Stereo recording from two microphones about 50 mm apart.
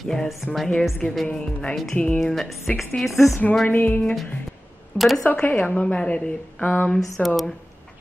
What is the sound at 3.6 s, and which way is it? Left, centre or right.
Music, left.